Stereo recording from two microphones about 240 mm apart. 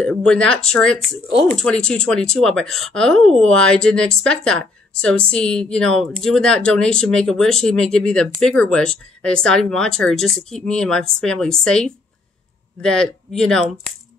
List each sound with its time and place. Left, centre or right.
0.0 s speech: centre